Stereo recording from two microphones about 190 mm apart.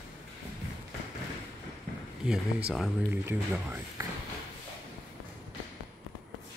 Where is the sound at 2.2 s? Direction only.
Centre (ahead or behind).